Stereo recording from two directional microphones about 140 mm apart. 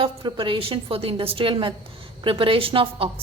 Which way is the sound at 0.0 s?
40° right (ahead or behind).